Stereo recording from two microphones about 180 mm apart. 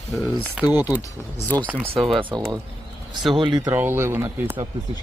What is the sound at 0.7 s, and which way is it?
Speech, 20° left (ahead or behind).